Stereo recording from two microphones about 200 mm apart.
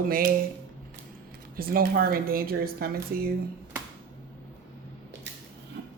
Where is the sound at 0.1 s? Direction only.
50° right (ahead or behind).